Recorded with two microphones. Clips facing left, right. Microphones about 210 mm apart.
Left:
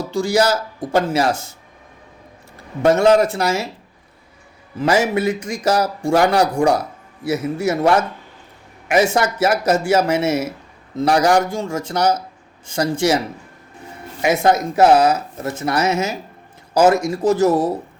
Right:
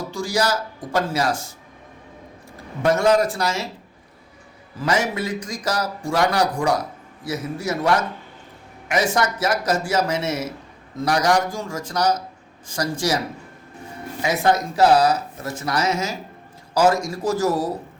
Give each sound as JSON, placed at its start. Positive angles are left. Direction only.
{"t": 0.1, "sound": "a man's voice", "side_deg": 25}
{"t": 2.8, "sound": "a man's voice", "side_deg": 25}
{"t": 4.8, "sound": "a man's voice", "side_deg": 25}
{"t": 14.5, "sound": "a man's voice", "side_deg": 25}